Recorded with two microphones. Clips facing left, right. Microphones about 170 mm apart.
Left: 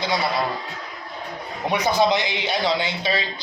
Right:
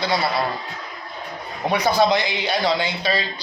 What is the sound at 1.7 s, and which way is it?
A man's voice, 20° left (ahead or behind).